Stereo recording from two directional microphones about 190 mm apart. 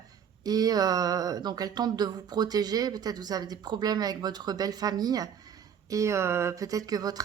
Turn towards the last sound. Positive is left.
turn(degrees=-20)  # may be behind; listen again after turning